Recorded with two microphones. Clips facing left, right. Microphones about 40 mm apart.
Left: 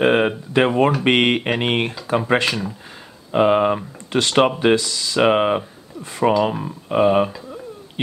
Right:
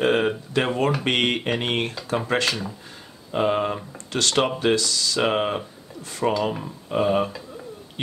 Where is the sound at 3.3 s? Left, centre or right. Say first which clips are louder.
Left 7 dB; left.